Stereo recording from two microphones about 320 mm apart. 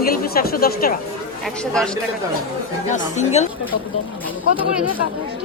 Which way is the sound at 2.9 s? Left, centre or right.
Left.